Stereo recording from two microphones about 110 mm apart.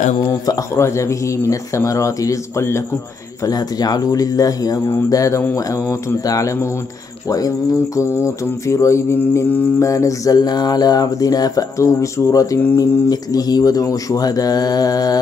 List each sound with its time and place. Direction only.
0.3 s speech: 30° left (ahead or behind)
3.4 s mantra: 35° left (ahead or behind)
5.4 s speech: 25° left (ahead or behind)
7.2 s mantra: 35° left (ahead or behind)